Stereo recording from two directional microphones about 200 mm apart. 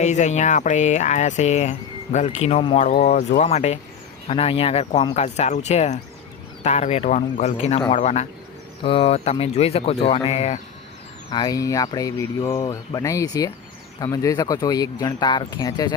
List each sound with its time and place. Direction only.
0.0 s speech: 35° left (ahead or behind)
11.3 s speech: 20° left (ahead or behind)